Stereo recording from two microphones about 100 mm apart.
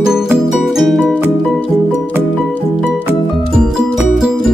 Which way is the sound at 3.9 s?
5° right (ahead or behind).